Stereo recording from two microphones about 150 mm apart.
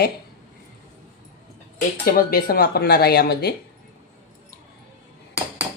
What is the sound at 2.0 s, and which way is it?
Speech, 80° left.